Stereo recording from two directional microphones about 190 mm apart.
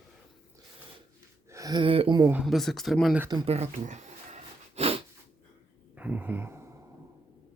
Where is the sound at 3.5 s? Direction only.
35° right (ahead or behind).